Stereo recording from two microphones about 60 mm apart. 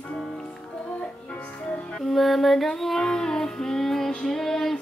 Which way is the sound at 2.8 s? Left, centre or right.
Centre.